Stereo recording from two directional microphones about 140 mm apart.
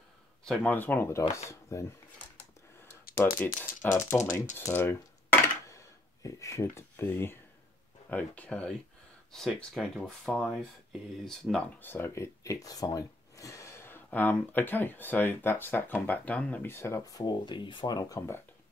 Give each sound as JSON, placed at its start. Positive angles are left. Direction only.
{"t": 0.5, "sound": "speech", "side_deg": 10}
{"t": 3.3, "sound": "speech", "side_deg": 75}
{"t": 3.6, "sound": "speech", "side_deg": 15}
{"t": 4.6, "sound": "coin", "side_deg": 15}
{"t": 8.1, "sound": "speech", "side_deg": 10}